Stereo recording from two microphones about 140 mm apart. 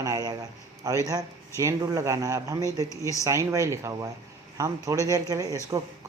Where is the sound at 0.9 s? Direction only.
25° right (ahead or behind).